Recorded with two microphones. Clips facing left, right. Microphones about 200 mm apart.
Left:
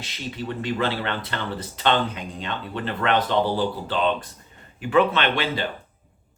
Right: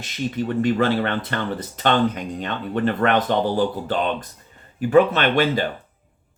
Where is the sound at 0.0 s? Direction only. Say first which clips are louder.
Right 7 dB; 50° right (ahead or behind).